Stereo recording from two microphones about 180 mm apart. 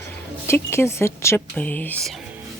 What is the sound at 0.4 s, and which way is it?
Speech, 15° left (ahead or behind).